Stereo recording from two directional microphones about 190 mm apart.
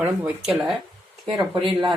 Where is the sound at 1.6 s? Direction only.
25° right (ahead or behind).